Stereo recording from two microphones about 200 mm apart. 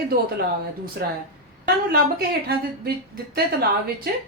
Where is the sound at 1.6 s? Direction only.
50° right (ahead or behind).